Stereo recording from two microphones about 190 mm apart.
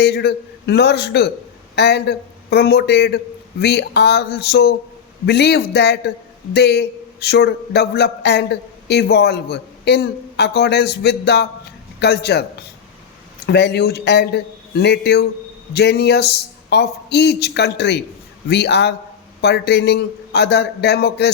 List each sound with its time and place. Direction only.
0.0 s a man's voice: 60° left (ahead or behind)